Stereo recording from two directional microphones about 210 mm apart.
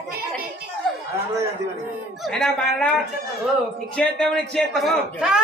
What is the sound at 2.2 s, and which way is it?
Speech, centre (ahead or behind).